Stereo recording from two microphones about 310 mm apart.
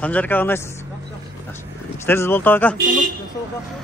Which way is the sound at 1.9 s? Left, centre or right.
Centre.